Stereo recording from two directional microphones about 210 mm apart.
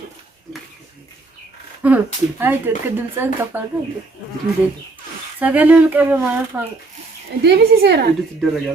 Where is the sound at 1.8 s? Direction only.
5° right (ahead or behind).